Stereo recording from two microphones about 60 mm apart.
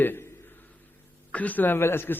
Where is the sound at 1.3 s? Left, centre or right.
Left.